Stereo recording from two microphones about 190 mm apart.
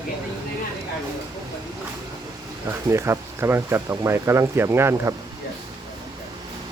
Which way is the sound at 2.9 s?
15° right (ahead or behind).